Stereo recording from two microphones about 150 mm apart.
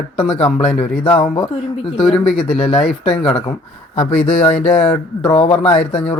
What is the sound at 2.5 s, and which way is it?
Speech, 40° left (ahead or behind).